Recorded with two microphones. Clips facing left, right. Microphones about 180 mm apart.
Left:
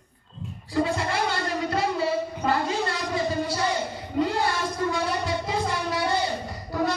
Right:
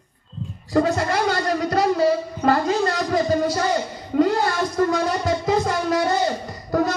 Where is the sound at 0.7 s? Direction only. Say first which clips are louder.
Right 6 dB; 45° right (ahead or behind).